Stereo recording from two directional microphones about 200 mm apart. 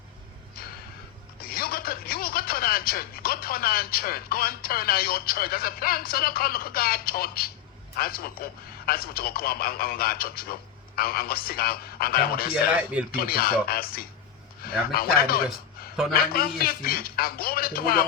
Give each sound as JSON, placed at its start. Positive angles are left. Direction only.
{"t": 1.4, "sound": "a man's voice", "side_deg": 50}